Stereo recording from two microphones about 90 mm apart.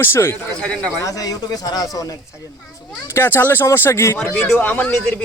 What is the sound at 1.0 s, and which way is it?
Speech, 40° left (ahead or behind).